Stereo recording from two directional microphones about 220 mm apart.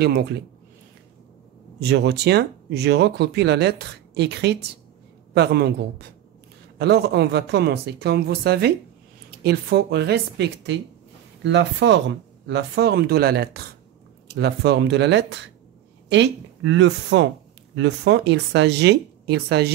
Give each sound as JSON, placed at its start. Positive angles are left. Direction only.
{"t": 0.0, "sound": "speech", "side_deg": -45}
{"t": 1.8, "sound": "speech", "side_deg": -50}